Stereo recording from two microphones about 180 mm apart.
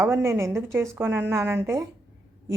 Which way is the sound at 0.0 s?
15° right (ahead or behind).